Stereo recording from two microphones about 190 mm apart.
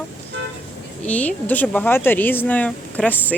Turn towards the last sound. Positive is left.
turn(degrees=5)  # may be behind; listen again after turning